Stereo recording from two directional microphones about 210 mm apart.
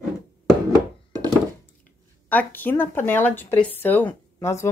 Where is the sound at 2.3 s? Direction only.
10° left (ahead or behind).